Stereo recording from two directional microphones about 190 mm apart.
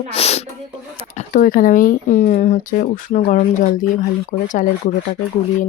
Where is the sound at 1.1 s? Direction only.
45° left (ahead or behind).